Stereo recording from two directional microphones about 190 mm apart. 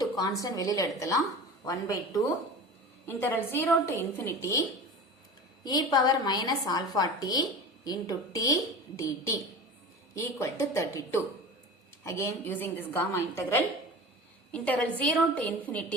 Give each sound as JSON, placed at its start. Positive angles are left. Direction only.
{"t": 0.0, "sound": "a woman's voice", "side_deg": 20}
{"t": 5.6, "sound": "a woman's voice", "side_deg": 20}